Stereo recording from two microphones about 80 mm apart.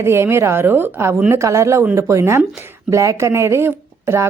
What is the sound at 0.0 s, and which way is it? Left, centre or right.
Speech, right.